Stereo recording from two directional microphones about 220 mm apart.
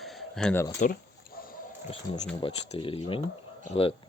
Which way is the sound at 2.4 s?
25° left (ahead or behind).